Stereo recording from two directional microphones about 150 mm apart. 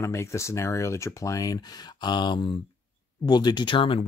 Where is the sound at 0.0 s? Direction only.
20° left (ahead or behind).